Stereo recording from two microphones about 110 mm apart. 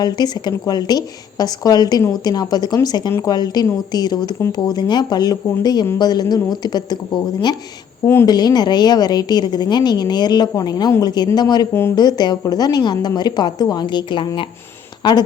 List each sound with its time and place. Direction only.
0.0 s a woman's voice: 40° left (ahead or behind)
8.0 s a woman's voice: 20° left (ahead or behind)
8.3 s a woman's voice: 40° left (ahead or behind)
11.7 s a woman's voice: 25° left (ahead or behind)
11.9 s a woman's voice: 40° left (ahead or behind)